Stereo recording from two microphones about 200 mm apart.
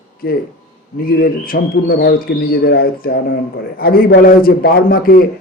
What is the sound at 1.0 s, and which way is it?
Speech, 45° left (ahead or behind).